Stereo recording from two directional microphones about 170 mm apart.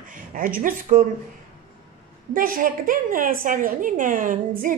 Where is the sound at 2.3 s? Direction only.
55° right (ahead or behind).